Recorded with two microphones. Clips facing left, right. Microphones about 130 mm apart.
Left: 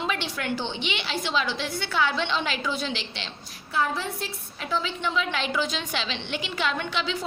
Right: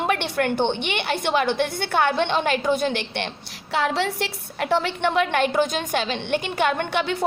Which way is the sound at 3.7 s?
80° right.